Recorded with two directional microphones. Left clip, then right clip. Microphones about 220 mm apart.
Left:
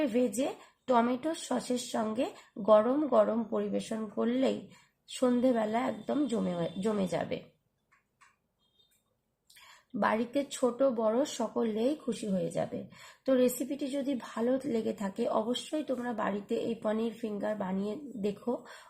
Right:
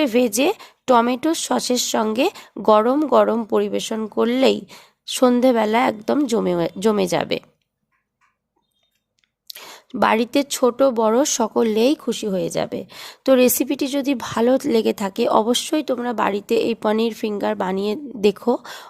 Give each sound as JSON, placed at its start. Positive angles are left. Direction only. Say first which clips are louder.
{"t": 0.0, "sound": "speech", "louder": "right 12 dB", "side_deg": -45}
{"t": 9.9, "sound": "speech", "louder": "right 12 dB", "side_deg": -40}